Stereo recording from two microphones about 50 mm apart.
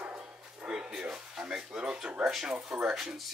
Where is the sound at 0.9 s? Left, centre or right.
Centre.